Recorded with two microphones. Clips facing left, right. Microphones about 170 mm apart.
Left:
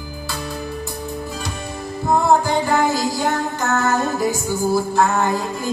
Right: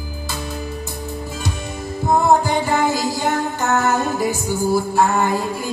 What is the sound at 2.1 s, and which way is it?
Music, 15° right (ahead or behind).